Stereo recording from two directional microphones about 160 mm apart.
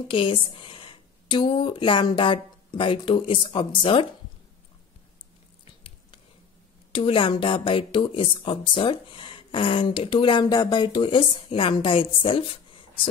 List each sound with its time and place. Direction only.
0.1 s speech: 35° left (ahead or behind)
5.7 s biting: 35° left (ahead or behind)
6.9 s speech: 35° left (ahead or behind)